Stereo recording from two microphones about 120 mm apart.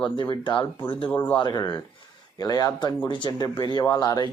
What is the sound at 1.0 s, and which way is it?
Speech, 15° left (ahead or behind).